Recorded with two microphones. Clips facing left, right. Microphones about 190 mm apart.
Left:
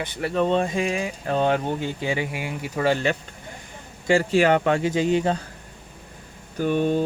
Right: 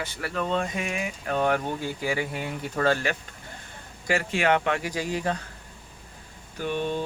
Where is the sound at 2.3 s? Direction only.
10° left (ahead or behind).